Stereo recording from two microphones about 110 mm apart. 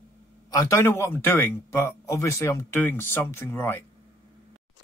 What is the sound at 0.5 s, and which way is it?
Speech, 30° left (ahead or behind).